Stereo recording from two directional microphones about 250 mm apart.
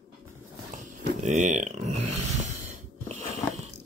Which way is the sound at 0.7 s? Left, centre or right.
Right.